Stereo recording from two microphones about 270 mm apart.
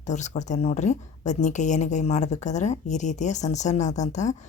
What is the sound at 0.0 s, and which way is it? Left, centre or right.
Speech, left.